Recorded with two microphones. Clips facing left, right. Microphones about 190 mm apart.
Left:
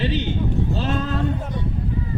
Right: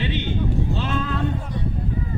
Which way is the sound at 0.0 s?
40° left (ahead or behind).